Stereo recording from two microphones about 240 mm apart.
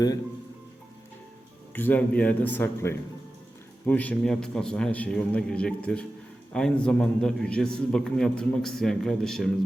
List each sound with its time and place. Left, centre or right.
1.7 s a man's voice: centre